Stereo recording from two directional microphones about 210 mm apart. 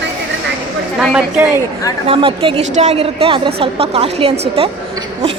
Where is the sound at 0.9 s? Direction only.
5° right (ahead or behind).